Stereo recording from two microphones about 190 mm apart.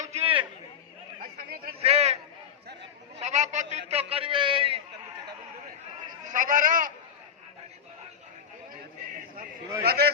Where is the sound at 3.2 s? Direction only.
40° right (ahead or behind).